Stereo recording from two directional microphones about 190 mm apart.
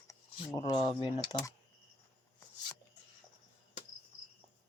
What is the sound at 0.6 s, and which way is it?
Speech, 25° left (ahead or behind).